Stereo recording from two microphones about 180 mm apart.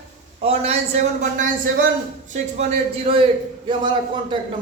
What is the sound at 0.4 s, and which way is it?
A man's voice, 35° right (ahead or behind).